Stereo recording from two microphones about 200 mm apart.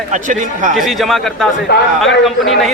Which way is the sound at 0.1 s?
40° right (ahead or behind).